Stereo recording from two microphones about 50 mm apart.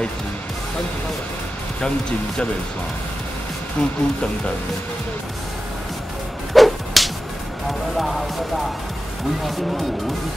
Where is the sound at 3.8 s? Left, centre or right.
Centre.